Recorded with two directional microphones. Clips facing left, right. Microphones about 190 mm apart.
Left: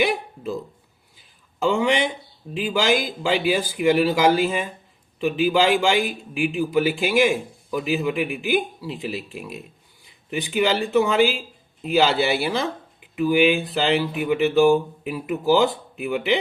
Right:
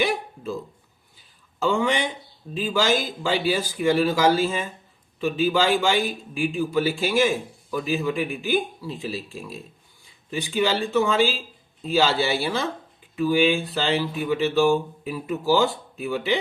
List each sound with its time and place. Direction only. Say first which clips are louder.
1.6 s a man's voice: left 2 dB; 15° left (ahead or behind)